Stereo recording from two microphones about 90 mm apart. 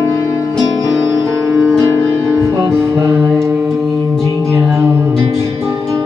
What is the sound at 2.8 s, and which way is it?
Music, 30° right (ahead or behind).